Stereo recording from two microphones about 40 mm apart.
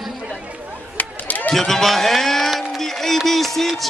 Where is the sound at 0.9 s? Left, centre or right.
Left.